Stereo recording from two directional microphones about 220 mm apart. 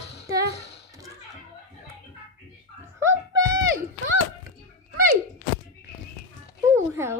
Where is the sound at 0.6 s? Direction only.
50° left (ahead or behind).